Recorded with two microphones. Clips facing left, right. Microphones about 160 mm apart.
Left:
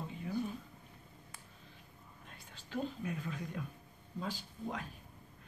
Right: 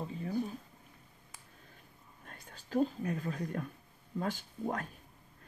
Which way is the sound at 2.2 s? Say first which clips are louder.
Right 6 dB; 45° right (ahead or behind).